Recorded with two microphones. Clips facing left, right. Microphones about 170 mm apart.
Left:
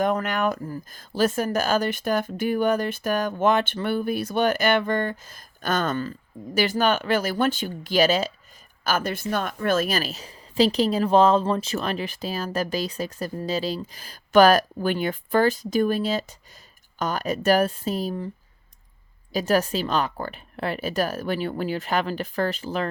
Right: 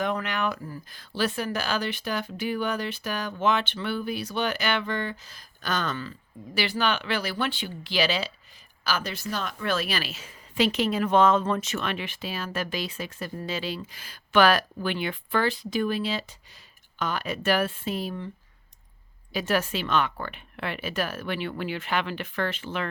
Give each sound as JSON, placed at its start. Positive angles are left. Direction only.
{"t": 0.0, "sound": "a woman's voice", "side_deg": 45}
{"t": 19.3, "sound": "a woman's voice", "side_deg": 40}